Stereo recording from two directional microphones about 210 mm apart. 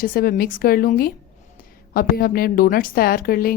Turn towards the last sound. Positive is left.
turn(degrees=45)  # may be behind; listen again after turning